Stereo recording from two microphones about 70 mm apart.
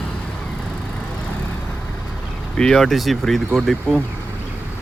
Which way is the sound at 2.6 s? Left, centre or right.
Centre.